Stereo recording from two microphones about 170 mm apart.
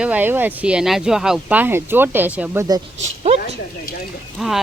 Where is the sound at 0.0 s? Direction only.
10° right (ahead or behind).